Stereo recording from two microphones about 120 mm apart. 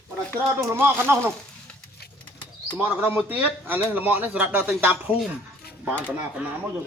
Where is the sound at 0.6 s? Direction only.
20° right (ahead or behind).